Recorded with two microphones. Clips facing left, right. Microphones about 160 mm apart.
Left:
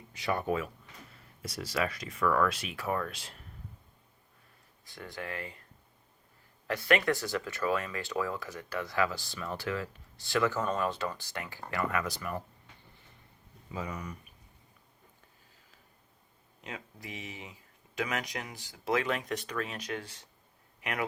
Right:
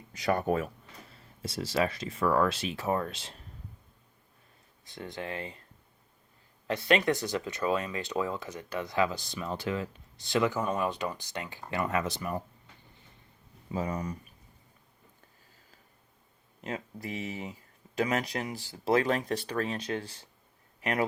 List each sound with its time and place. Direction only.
0.1 s speech: 40° right (ahead or behind)
1.1 s speech: 25° right (ahead or behind)
4.9 s speech: 20° right (ahead or behind)
6.7 s speech: 20° right (ahead or behind)
13.7 s speech: 35° right (ahead or behind)
16.6 s speech: 40° right (ahead or behind)